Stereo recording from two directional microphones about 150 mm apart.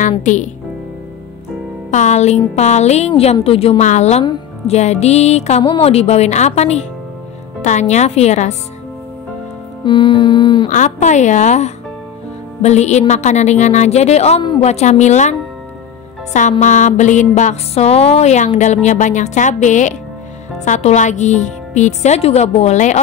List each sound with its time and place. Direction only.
0.2 s a woman's voice: 55° left (ahead or behind)
1.9 s a woman's voice: 50° left (ahead or behind)
9.8 s music: 30° left (ahead or behind)
10.7 s a woman's voice: 55° left (ahead or behind)
16.3 s a woman's voice: 55° left (ahead or behind)